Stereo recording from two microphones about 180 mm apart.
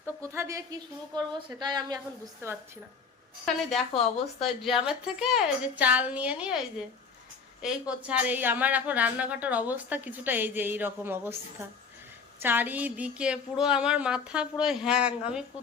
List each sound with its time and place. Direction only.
0.2 s a woman's voice: 15° right (ahead or behind)
3.4 s a woman's voice: centre (ahead or behind)
7.6 s speech: 5° right (ahead or behind)
12.4 s a woman's voice: 10° right (ahead or behind)